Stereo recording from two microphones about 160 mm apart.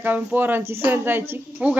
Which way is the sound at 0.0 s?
10° right (ahead or behind).